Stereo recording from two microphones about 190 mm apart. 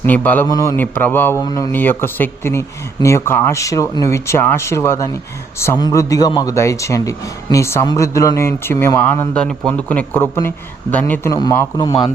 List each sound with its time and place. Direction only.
0.0 s a man's voice: 10° left (ahead or behind)